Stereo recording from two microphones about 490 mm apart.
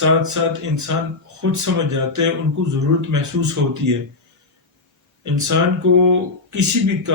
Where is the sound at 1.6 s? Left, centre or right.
Right.